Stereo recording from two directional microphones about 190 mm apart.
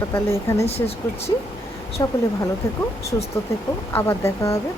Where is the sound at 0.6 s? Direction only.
30° left (ahead or behind).